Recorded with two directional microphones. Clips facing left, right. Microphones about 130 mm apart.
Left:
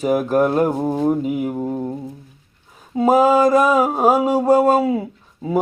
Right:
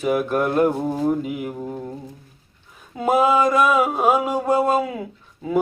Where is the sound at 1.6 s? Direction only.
15° left (ahead or behind).